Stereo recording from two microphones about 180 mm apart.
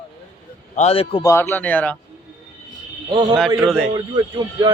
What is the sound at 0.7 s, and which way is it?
Speech, 35° left (ahead or behind).